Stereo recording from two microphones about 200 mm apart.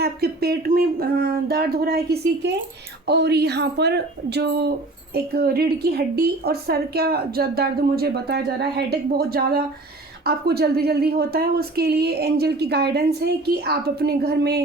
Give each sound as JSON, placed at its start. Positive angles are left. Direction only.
{"t": 0.0, "sound": "a woman's voice", "side_deg": -50}